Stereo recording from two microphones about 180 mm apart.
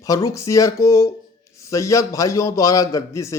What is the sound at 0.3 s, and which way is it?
Speech, 15° left (ahead or behind).